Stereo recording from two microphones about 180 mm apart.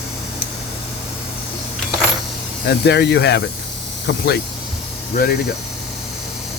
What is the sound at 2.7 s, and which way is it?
Speech, 70° left (ahead or behind).